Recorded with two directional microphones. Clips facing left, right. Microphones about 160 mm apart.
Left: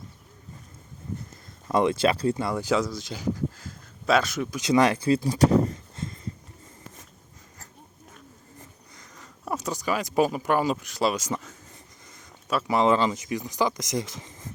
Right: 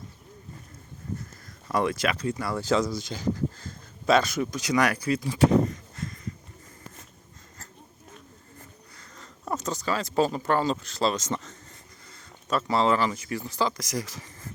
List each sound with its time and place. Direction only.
1.6 s speech: 20° left (ahead or behind); by 4.4 s centre (ahead or behind)
4.6 s speech: 25° left (ahead or behind)
6.0 s a sound: 25° left (ahead or behind)
9.0 s speech: 10° left (ahead or behind)